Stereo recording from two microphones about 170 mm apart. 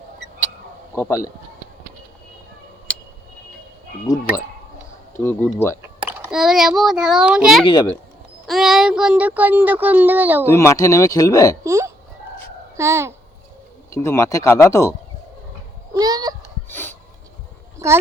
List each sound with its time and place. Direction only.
0.9 s speech: 15° left (ahead or behind)
5.1 s speech: 10° left (ahead or behind)
6.0 s a child's voice: 10° right (ahead or behind)
7.6 s speech: 25° left (ahead or behind)
8.4 s speech: centre (ahead or behind)
10.4 s speech: 15° left (ahead or behind)
11.6 s a child's voice: 15° right (ahead or behind)
13.9 s speech: 15° left (ahead or behind)
16.0 s a sound: 25° right (ahead or behind)
16.7 s a sound: 10° left (ahead or behind)
17.8 s speech: 15° right (ahead or behind)